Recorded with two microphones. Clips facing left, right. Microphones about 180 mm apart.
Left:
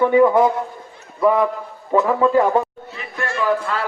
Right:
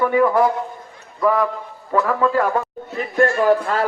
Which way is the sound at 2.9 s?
45° right (ahead or behind).